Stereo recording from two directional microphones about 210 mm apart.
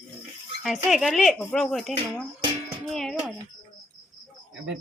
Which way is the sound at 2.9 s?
Centre (ahead or behind).